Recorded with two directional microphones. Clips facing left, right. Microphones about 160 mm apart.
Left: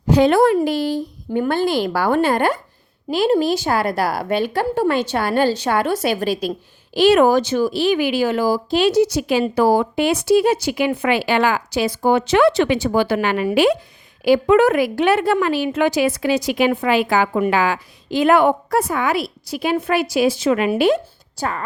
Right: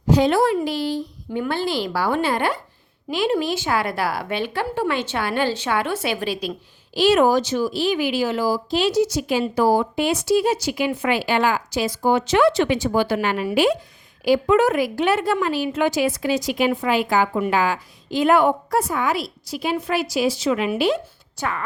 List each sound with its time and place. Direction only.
0.1 s speech: 60° left (ahead or behind)
6.9 s a woman's voice: 60° left (ahead or behind)
21.3 s speech: 35° left (ahead or behind)